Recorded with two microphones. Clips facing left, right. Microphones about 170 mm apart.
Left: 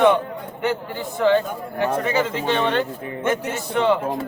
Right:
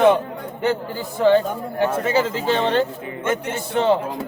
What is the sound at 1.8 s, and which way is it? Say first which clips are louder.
A man's voice: right 1 dB; 30° right (ahead or behind).